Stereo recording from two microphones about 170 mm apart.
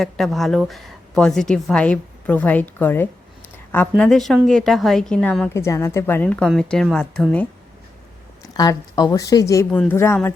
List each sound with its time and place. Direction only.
0.0 s a woman's voice: centre (ahead or behind)
5.5 s a woman's voice: 15° left (ahead or behind)
8.5 s a woman's voice: 20° left (ahead or behind)
9.7 s speech: 10° left (ahead or behind)